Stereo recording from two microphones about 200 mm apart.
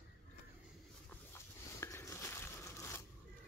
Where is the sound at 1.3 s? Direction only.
10° left (ahead or behind).